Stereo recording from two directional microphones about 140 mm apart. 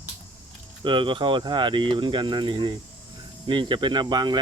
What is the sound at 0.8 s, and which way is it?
Speech, 35° right (ahead or behind).